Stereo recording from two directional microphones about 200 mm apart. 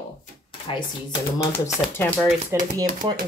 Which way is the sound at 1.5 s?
10° left (ahead or behind).